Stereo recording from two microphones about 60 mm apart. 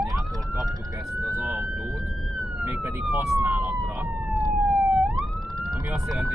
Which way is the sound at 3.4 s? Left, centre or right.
Right.